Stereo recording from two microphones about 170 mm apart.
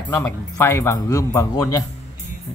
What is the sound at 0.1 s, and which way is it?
A man's voice, 15° left (ahead or behind).